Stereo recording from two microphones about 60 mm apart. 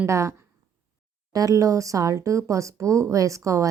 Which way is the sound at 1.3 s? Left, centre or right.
Right.